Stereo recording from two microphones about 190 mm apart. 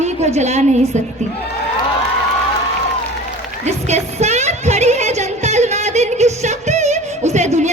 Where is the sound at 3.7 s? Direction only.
35° right (ahead or behind).